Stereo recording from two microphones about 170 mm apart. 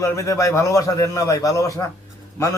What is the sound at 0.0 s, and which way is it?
Speech, 15° left (ahead or behind).